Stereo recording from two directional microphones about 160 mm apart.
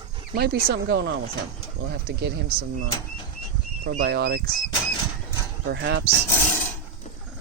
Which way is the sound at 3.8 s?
65° right (ahead or behind).